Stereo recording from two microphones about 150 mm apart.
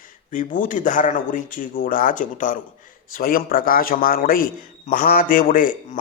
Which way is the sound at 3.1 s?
70° left (ahead or behind).